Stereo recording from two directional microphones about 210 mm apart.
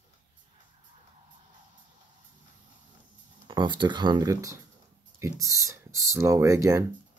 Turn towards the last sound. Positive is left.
turn(degrees=-15)  # may be behind; listen again after turning